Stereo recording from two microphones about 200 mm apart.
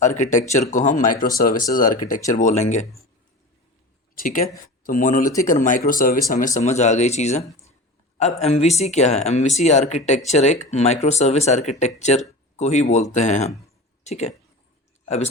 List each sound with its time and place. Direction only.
0.0 s speech: 35° left (ahead or behind)
4.1 s speech: 45° left (ahead or behind)